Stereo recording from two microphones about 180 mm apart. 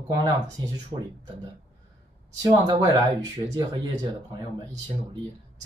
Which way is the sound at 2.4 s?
20° right (ahead or behind).